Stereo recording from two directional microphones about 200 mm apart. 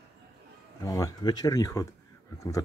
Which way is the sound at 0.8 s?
20° left (ahead or behind).